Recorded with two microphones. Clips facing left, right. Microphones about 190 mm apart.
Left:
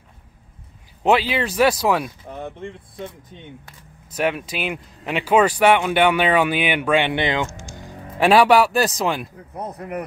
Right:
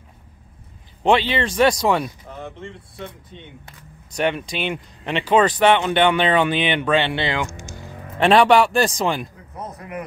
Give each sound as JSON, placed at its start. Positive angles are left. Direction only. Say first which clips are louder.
{"t": 1.0, "sound": "speech", "louder": "even", "side_deg": 5}
{"t": 2.2, "sound": "speech", "louder": "left 3 dB", "side_deg": 15}
{"t": 4.1, "sound": "speech", "louder": "even", "side_deg": 5}
{"t": 7.4, "sound": "speech", "louder": "even", "side_deg": -15}
{"t": 7.8, "sound": "speech", "louder": "even", "side_deg": 5}
{"t": 9.7, "sound": "speech", "louder": "left 3 dB", "side_deg": 40}